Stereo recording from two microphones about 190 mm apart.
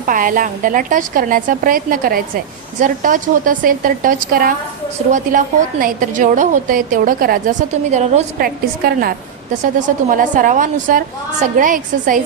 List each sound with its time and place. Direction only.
0.0 s a woman's voice: 45° right (ahead or behind)
8.8 s a woman's voice: 50° right (ahead or behind)